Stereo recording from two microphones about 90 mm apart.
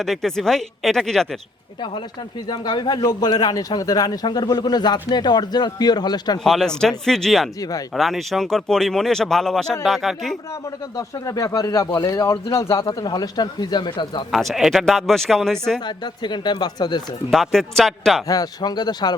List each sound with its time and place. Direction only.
0.0 s speech: 5° left (ahead or behind)
2.5 s a man's voice: 50° left (ahead or behind)
6.4 s speech: 5° left (ahead or behind)
10.9 s speech: 40° left (ahead or behind)
12.9 s a man's voice: 45° left (ahead or behind)
14.3 s speech: centre (ahead or behind)
16.2 s speech: 55° left (ahead or behind)
17.3 s speech: centre (ahead or behind)
18.3 s a man's voice: 45° left (ahead or behind)